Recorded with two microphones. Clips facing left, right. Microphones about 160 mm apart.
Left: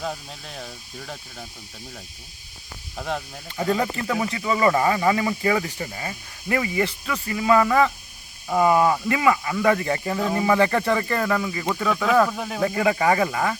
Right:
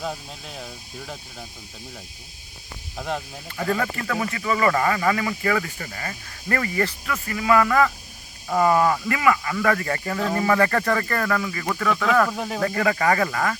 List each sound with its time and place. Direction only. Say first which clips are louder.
0.0 s speech: even; centre (ahead or behind)
2.9 s speech: even; centre (ahead or behind)
3.6 s speech: left 2 dB; 20° left (ahead or behind)
12.3 s speech: right 1 dB; centre (ahead or behind)
12.6 s speech: left 1 dB; 15° left (ahead or behind)